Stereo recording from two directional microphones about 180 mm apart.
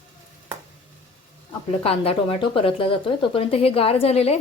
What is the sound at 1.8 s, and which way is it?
Speech, 30° left (ahead or behind).